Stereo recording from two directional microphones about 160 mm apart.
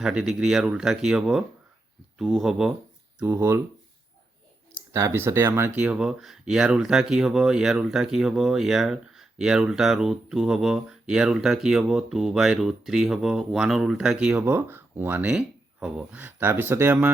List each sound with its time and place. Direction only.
0.0 s speech: 5° right (ahead or behind)
3.2 s speech: 15° right (ahead or behind)
4.9 s speech: 15° right (ahead or behind)